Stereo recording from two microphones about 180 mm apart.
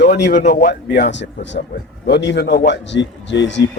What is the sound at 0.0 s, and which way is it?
Speech, 50° left (ahead or behind).